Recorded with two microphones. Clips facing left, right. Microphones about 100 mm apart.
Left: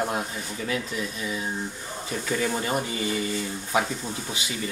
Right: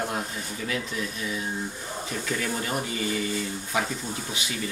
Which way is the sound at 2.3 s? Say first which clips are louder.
Left 5 dB; 25° left (ahead or behind).